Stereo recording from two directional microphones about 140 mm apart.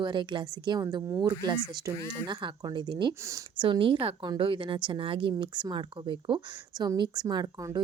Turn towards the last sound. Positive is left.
turn(degrees=-25)  # may be behind; listen again after turning